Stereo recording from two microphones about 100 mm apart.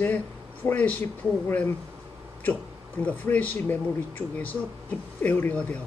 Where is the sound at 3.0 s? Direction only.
15° left (ahead or behind).